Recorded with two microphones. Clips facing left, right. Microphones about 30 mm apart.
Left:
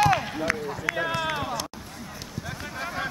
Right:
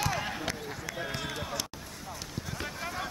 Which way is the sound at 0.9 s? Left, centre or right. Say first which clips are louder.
Left 12 dB; left.